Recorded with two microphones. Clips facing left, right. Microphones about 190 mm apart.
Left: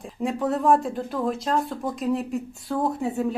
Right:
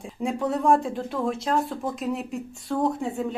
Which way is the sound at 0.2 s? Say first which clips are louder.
Left 1 dB; centre (ahead or behind).